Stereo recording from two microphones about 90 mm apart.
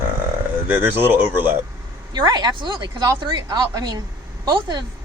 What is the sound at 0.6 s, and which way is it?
Speech, 20° right (ahead or behind).